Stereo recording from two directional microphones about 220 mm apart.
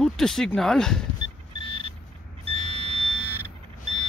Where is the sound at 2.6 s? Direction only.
25° left (ahead or behind).